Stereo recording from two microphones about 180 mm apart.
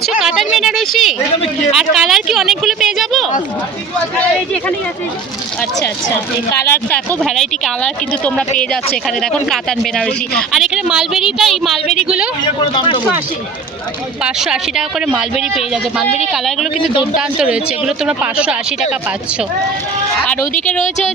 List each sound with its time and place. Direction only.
0.0 s speech: centre (ahead or behind)
6.5 s speech: 15° left (ahead or behind); by 12.3 s 5° right (ahead or behind)
12.5 s speech: 25° left (ahead or behind)
14.3 s speech: 5° right (ahead or behind)
17.2 s speech: 5° right (ahead or behind)